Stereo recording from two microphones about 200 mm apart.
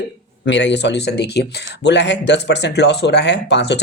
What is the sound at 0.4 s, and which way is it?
Speech, 60° left (ahead or behind).